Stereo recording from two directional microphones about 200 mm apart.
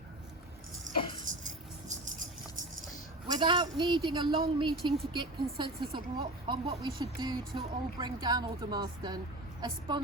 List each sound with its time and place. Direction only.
0.9 s music: 40° right (ahead or behind)
3.2 s speech: 20° right (ahead or behind)